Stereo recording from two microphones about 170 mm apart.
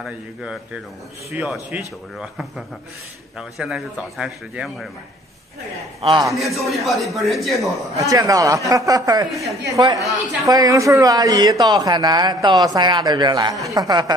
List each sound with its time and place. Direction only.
0.0 s speech: 5° right (ahead or behind)
5.9 s a man's voice: 35° right (ahead or behind)
6.3 s speech: centre (ahead or behind)
8.0 s speech: 20° right (ahead or behind)